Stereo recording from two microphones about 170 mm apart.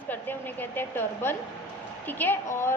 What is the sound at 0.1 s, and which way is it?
A woman's voice, 10° left (ahead or behind).